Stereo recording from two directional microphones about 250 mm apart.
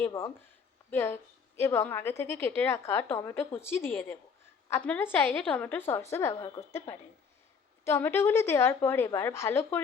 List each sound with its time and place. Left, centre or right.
0.0 s a woman's voice: centre
6.4 s a woman's voice: left
7.9 s a woman's voice: centre